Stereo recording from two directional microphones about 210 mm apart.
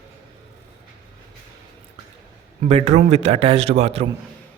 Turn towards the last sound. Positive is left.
turn(degrees=-30)  # may be behind; listen again after turning